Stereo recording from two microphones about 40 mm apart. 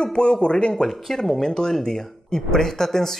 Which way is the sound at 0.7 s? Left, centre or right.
Centre.